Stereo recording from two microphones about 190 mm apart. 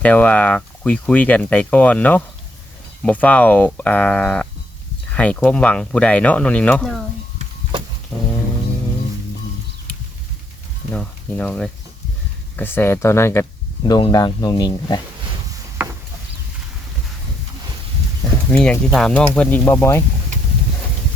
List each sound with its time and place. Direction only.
0.0 s speech: 10° left (ahead or behind)
10.9 s speech: 5° left (ahead or behind); by 15.0 s 20° left (ahead or behind)
15.8 s a sound: 10° right (ahead or behind)
18.5 s speech: 5° left (ahead or behind)